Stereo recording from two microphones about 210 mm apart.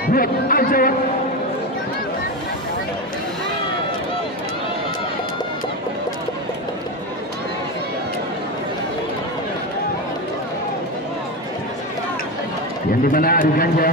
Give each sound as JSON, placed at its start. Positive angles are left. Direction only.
{"t": 0.0, "sound": "speech", "side_deg": 45}
{"t": 13.0, "sound": "speech", "side_deg": 40}